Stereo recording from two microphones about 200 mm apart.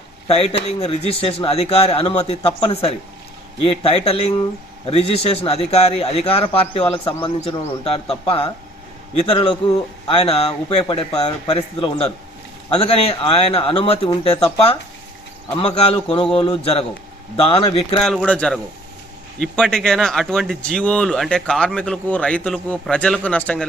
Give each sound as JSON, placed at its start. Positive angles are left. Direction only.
{"t": 0.3, "sound": "a man's voice", "side_deg": 30}
{"t": 18.0, "sound": "speech", "side_deg": 0}